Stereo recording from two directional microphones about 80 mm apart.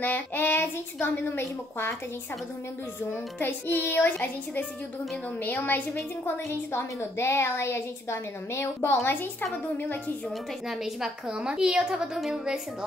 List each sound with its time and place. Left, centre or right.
0.0 s a woman's voice: left
3.3 s a woman's voice: left
10.7 s a woman's voice: centre